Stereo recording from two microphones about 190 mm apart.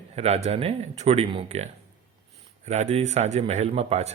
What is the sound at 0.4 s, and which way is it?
Speech, 30° right (ahead or behind).